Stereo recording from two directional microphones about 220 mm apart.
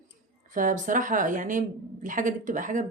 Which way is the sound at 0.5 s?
35° right (ahead or behind).